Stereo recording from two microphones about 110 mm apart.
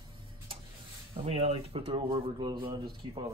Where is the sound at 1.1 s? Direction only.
60° right (ahead or behind).